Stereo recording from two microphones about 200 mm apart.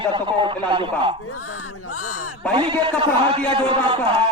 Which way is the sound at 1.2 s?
90° left.